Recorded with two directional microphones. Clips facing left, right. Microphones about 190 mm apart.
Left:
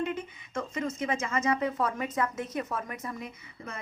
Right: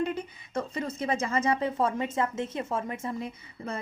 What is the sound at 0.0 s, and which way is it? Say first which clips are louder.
A woman's voice: right 2 dB; 35° right (ahead or behind).